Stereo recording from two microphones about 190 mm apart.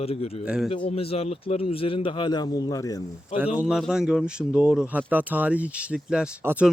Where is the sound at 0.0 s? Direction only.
30° left (ahead or behind).